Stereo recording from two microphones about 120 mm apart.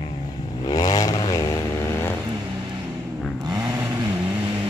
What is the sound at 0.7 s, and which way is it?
Vehicle, 35° left (ahead or behind).